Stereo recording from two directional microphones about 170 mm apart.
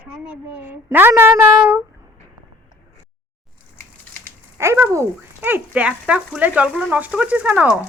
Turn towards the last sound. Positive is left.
turn(degrees=-10)  # may be behind; listen again after turning